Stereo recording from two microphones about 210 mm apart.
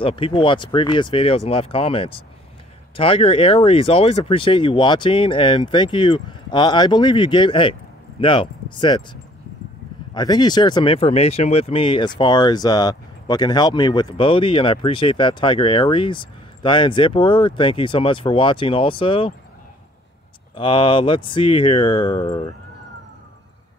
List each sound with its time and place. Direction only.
0.0 s speech: 25° left (ahead or behind)
20.5 s speech: 25° left (ahead or behind)